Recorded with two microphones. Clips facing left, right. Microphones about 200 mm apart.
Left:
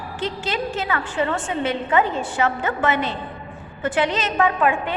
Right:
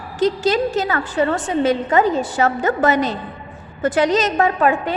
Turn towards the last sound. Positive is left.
turn(degrees=-40)  # may be behind; listen again after turning